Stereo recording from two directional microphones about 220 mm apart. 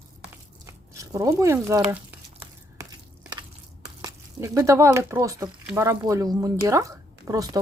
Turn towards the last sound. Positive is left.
turn(degrees=-15)  # may be behind; listen again after turning